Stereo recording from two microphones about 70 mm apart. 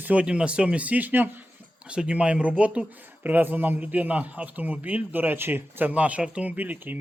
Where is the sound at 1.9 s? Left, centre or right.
Centre; by 5.9 s right.